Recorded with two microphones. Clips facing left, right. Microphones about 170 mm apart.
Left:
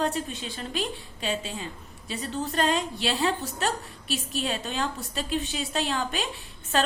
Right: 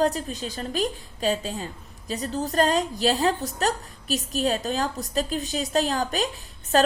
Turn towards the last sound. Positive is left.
turn(degrees=-40)  # may be behind; listen again after turning